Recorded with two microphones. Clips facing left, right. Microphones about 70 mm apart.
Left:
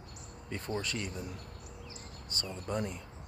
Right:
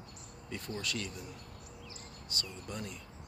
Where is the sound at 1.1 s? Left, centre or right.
Left.